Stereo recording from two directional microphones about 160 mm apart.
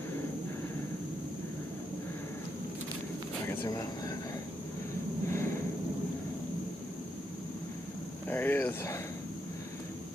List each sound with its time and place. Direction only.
3.4 s speech: 15° left (ahead or behind)
5.3 s a sound: 15° left (ahead or behind)
8.3 s speech: 10° left (ahead or behind)